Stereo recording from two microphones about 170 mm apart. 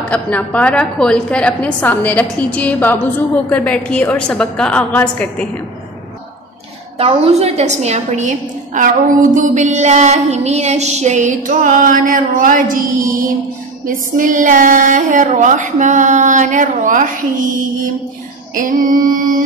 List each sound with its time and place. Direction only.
0.1 s a woman's voice: 10° left (ahead or behind)
7.0 s a woman's voice: 35° right (ahead or behind)
18.5 s a woman's voice: 50° right (ahead or behind)